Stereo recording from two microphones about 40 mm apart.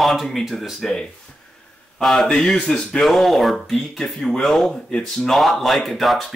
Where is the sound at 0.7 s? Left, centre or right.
Centre.